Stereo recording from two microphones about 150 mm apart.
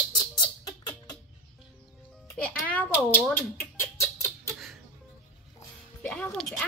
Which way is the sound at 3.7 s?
15° left (ahead or behind).